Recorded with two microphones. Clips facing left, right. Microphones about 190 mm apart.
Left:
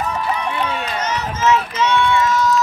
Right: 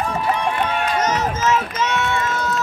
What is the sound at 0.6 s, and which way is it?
Run, 45° right (ahead or behind).